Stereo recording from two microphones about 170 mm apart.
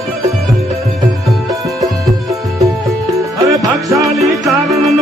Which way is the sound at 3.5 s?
20° right (ahead or behind).